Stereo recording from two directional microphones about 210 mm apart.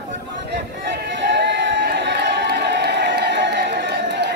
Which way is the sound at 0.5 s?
55° right (ahead or behind).